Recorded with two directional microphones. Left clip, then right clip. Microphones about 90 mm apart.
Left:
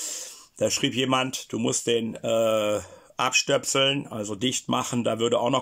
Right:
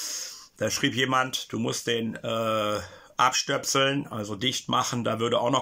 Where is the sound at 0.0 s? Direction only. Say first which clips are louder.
Right 1 dB; 35° left (ahead or behind).